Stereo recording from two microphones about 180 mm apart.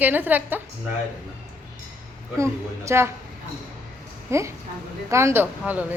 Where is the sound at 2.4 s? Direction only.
15° right (ahead or behind).